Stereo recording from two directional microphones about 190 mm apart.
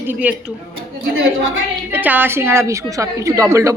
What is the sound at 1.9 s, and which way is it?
A woman's voice, 10° right (ahead or behind).